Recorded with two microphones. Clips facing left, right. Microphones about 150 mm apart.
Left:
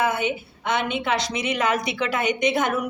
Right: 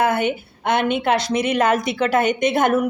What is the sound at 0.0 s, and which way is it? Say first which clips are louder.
A woman's voice: right 4 dB; 60° right (ahead or behind).